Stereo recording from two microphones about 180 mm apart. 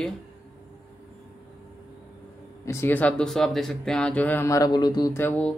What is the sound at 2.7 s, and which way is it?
Speech, 10° left (ahead or behind).